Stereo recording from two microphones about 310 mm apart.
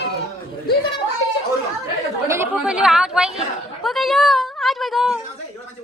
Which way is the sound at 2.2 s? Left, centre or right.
Centre.